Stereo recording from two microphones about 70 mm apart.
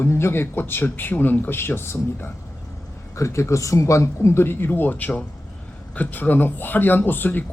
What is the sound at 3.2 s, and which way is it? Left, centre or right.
A man's voice, left.